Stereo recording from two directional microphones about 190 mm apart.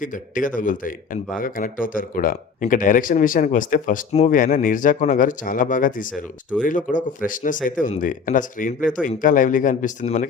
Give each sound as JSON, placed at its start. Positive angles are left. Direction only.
{"t": 0.0, "sound": "speech", "side_deg": 45}